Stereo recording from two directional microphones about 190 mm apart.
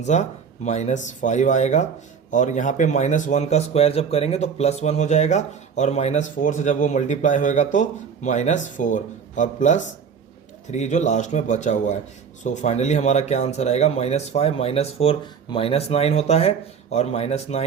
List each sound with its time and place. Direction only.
0.0 s speech: 35° left (ahead or behind)